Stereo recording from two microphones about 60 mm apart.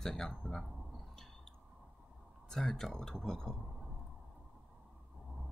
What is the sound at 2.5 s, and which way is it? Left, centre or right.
Speech, centre.